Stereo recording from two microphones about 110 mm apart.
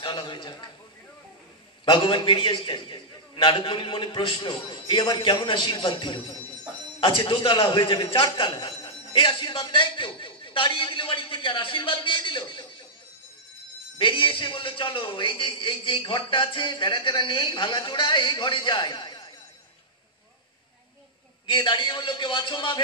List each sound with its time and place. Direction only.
0.0 s a man's voice: 45° left (ahead or behind)
1.9 s a man's voice: 45° left (ahead or behind)
13.9 s a man's voice: 50° left (ahead or behind)
21.5 s a man's voice: 45° left (ahead or behind)